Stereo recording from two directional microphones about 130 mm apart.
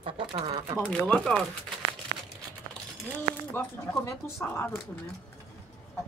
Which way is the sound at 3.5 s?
20° left (ahead or behind).